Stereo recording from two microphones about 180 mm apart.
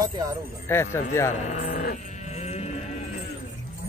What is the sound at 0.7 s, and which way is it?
Speech, 15° left (ahead or behind).